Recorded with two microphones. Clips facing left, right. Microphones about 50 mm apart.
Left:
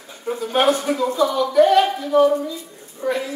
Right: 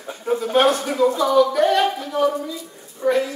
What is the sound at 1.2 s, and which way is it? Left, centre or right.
A man's voice, centre.